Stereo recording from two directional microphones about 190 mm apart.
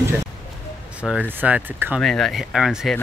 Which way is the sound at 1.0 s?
5° right (ahead or behind).